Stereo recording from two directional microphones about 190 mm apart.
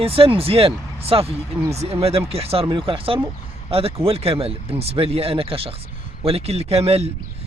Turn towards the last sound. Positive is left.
turn(degrees=-30)  # may be behind; listen again after turning